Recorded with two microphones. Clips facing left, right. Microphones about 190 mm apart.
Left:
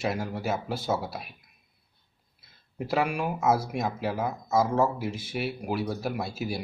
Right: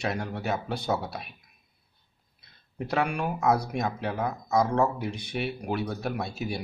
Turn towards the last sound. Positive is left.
turn(degrees=0)  # may be behind; listen again after turning